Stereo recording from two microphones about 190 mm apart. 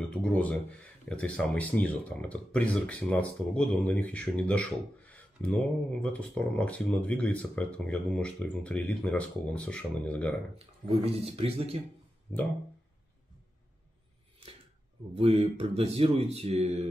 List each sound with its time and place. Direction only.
0.1 s speech: 5° left (ahead or behind)
10.6 s speech: 30° right (ahead or behind)
15.1 s speech: 30° right (ahead or behind)